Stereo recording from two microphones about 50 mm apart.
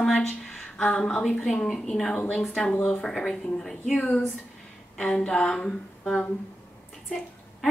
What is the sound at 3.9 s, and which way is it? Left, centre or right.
Speech, left.